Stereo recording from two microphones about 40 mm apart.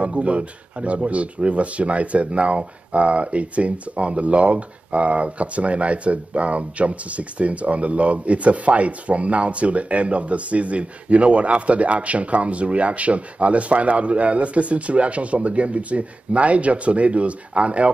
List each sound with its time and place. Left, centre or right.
0.0 s speech: right